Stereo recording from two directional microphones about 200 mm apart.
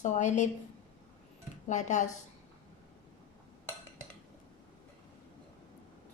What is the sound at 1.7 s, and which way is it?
Speech, 35° left (ahead or behind).